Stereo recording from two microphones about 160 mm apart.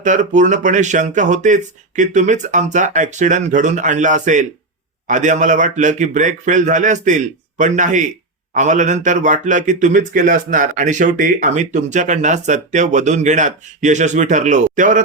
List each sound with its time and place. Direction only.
0.0 s speech: 50° right (ahead or behind)